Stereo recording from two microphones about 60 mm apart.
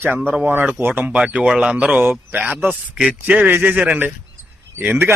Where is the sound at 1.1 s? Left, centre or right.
Centre.